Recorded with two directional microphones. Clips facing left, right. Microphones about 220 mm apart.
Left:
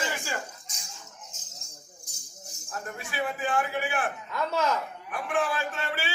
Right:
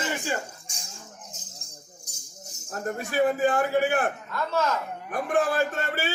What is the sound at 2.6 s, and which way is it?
A man's voice, 40° right (ahead or behind).